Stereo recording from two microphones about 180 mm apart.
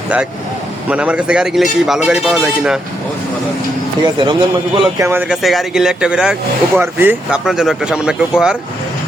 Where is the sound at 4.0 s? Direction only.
25° right (ahead or behind).